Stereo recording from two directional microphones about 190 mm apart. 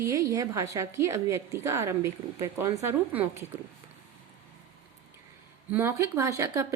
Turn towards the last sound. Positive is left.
turn(degrees=-15)  # may be behind; listen again after turning